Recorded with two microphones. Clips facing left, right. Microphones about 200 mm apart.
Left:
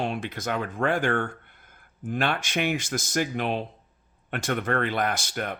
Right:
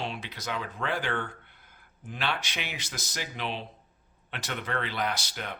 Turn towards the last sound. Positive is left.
turn(degrees=50)  # may be behind; listen again after turning